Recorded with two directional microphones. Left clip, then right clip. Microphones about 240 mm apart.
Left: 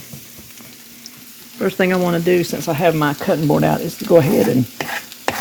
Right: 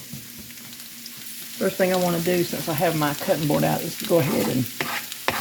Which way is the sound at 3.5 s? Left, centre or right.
Left.